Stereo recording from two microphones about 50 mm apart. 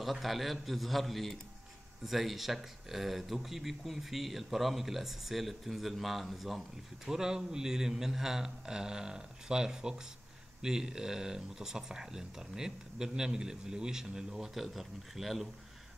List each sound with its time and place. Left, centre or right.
0.0 s speech: centre
7.1 s speech: centre